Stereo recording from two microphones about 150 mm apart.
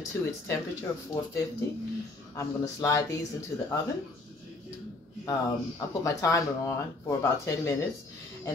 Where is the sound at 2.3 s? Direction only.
20° left (ahead or behind).